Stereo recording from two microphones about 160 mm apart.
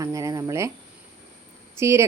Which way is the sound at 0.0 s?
20° right (ahead or behind).